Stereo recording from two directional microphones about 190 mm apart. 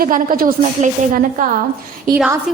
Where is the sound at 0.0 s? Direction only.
45° right (ahead or behind).